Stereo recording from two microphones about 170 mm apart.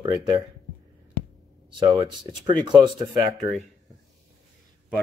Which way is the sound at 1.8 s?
25° right (ahead or behind).